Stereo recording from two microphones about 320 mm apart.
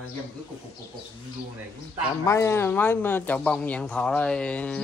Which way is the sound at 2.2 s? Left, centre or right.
Centre.